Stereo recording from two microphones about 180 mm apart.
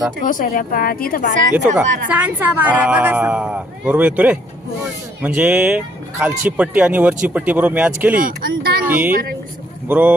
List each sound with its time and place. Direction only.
0.3 s a woman's voice: 45° left (ahead or behind)
1.5 s a woman's voice: 10° right (ahead or behind)
8.1 s speech: 50° right (ahead or behind)
9.9 s a woman's voice: 10° right (ahead or behind)